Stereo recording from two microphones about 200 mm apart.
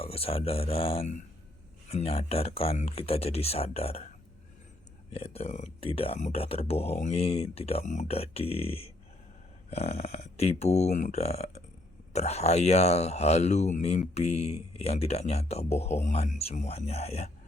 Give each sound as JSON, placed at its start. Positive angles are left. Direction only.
{"t": 0.0, "sound": "speech", "side_deg": 30}
{"t": 5.1, "sound": "speech", "side_deg": 30}